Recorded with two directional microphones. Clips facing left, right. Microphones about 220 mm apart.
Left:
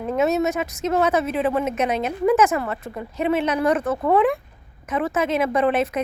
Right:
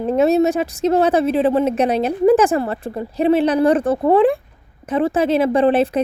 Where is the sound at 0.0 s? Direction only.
30° right (ahead or behind).